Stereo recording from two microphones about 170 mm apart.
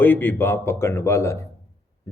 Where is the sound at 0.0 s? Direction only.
10° left (ahead or behind).